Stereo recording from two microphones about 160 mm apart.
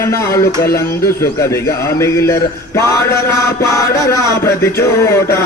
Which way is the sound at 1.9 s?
15° left (ahead or behind).